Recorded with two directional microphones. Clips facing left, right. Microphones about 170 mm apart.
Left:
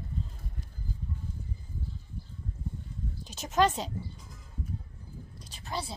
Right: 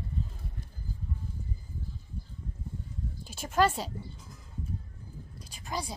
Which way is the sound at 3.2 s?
10° right (ahead or behind).